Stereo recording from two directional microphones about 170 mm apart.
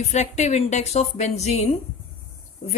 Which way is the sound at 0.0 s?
40° left (ahead or behind).